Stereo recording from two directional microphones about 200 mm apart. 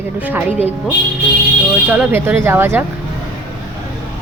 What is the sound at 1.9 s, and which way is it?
Speech, 10° right (ahead or behind).